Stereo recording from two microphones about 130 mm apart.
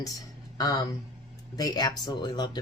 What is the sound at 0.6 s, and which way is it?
Speech, 30° left (ahead or behind).